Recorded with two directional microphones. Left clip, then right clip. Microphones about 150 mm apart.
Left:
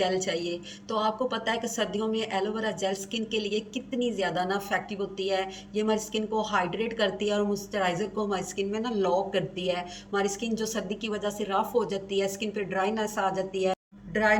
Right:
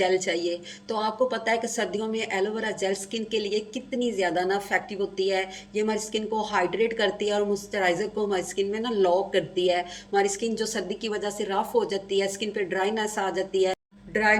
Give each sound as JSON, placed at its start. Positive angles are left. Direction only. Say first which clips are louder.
{"t": 0.0, "sound": "a woman's voice", "louder": "right 3 dB", "side_deg": -35}